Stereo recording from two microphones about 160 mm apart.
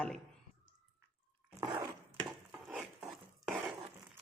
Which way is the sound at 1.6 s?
20° right (ahead or behind).